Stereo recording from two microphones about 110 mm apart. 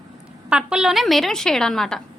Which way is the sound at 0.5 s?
5° right (ahead or behind).